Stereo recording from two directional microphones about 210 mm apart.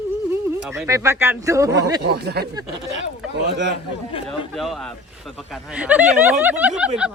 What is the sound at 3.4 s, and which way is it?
Speech, 55° right (ahead or behind).